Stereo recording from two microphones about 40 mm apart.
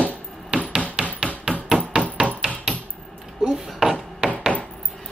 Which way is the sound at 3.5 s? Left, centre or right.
Centre.